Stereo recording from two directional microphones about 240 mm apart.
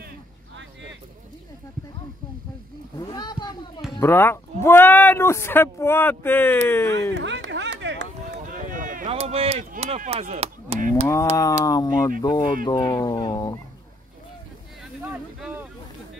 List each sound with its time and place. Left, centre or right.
3.0 s a sound: centre
3.9 s speech: centre
7.2 s a sound: right
8.4 s run: right
11.6 s speech: centre
15.0 s boat: centre